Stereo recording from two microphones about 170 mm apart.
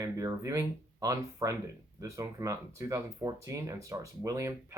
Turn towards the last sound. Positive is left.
turn(degrees=-20)  # may be behind; listen again after turning